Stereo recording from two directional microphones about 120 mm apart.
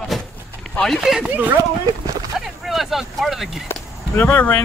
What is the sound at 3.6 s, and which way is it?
Speech, 15° left (ahead or behind).